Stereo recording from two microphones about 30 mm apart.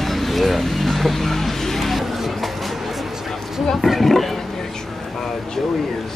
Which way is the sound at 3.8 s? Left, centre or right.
Centre.